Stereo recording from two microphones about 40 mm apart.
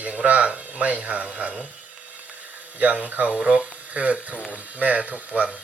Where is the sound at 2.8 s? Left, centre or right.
Right.